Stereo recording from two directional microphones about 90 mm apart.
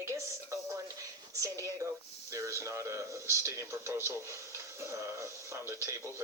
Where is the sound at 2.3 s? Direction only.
35° right (ahead or behind).